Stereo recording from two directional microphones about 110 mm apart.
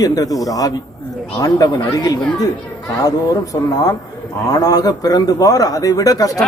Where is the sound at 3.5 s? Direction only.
35° left (ahead or behind).